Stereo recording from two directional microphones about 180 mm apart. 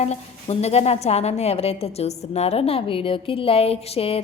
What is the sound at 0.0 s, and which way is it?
A woman's voice, 35° left (ahead or behind).